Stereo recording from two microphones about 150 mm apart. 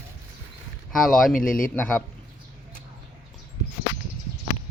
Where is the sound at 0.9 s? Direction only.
Centre (ahead or behind).